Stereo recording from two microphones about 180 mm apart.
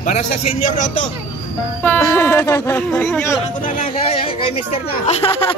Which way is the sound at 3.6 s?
45° left (ahead or behind).